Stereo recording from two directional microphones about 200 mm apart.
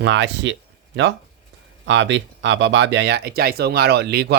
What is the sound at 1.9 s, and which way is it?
Speech, 65° right (ahead or behind).